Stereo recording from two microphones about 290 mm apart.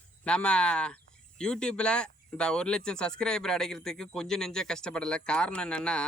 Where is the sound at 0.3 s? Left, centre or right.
Centre.